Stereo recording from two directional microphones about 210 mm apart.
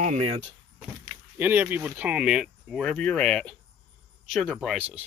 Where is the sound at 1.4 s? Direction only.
10° right (ahead or behind).